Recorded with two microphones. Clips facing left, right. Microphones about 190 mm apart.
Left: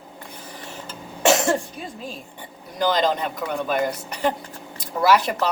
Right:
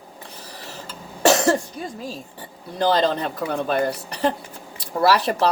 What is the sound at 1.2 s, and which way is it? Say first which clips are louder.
Cough: right 2 dB; 35° right (ahead or behind).